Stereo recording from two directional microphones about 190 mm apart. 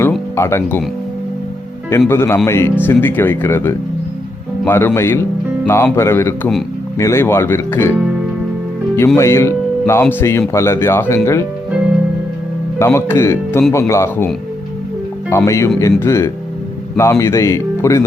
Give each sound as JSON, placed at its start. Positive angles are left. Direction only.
{"t": 0.0, "sound": "music", "side_deg": 15}
{"t": 2.0, "sound": "speech", "side_deg": 15}
{"t": 9.1, "sound": "speech", "side_deg": 15}
{"t": 12.8, "sound": "speech", "side_deg": 15}
{"t": 15.3, "sound": "speech", "side_deg": 15}